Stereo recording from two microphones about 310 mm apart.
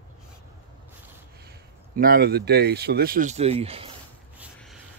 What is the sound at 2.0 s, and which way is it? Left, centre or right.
Speech, right.